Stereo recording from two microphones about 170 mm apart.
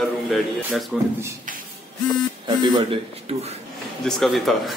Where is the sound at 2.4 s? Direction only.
25° right (ahead or behind).